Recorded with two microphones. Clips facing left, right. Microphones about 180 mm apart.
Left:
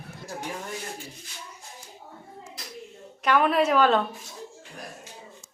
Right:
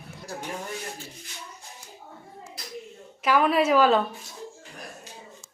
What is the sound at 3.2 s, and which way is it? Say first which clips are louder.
Speech: right 1 dB; 5° right (ahead or behind).